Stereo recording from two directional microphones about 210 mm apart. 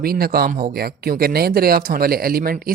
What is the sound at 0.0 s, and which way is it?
Speech, 45° right (ahead or behind).